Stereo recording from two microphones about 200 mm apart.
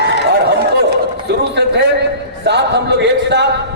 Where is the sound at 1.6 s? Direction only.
55° right (ahead or behind).